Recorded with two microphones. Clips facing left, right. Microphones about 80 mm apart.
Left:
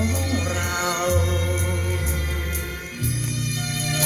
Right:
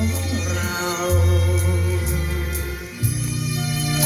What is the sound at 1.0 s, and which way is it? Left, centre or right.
Music, centre.